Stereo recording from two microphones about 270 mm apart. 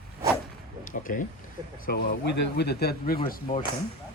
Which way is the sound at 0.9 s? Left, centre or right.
Left.